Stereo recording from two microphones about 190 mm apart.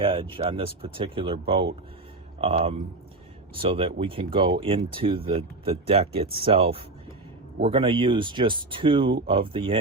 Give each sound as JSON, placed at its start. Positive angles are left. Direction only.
{"t": 0.0, "sound": "speech", "side_deg": -25}